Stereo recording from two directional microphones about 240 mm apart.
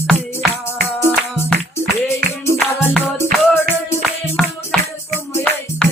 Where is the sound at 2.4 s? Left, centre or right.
Centre.